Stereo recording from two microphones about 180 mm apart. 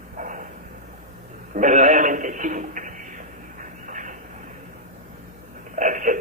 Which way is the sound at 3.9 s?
45° right (ahead or behind).